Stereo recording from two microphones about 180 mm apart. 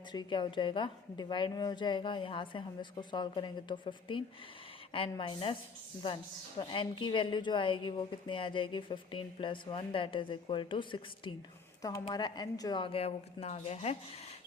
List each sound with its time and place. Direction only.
0.1 s a woman's voice: 25° left (ahead or behind)
6.6 s a woman's voice: 30° left (ahead or behind)